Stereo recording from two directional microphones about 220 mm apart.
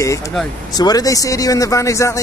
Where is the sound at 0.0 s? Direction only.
15° left (ahead or behind).